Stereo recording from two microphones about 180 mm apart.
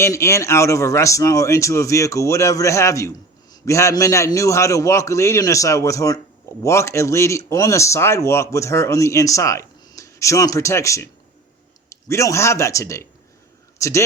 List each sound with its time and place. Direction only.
0.0 s a man's voice: 15° left (ahead or behind)